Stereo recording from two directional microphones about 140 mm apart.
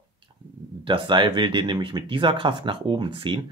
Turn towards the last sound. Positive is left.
turn(degrees=-35)  # may be behind; listen again after turning